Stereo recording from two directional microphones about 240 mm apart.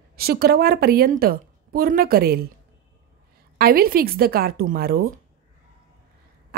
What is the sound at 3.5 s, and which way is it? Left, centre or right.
Speech, right.